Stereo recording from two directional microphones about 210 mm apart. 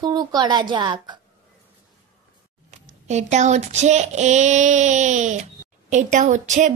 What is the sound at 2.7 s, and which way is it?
Speech, 35° right (ahead or behind).